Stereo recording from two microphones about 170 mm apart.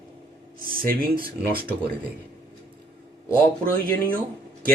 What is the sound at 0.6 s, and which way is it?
Speech, 55° right (ahead or behind).